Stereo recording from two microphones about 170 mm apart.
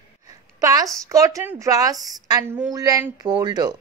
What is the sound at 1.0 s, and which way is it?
A woman's voice, 20° right (ahead or behind).